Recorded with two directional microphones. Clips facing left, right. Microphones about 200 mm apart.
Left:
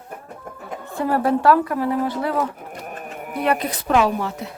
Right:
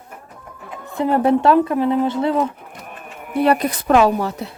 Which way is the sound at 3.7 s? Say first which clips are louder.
Right 4 dB; 45° right (ahead or behind).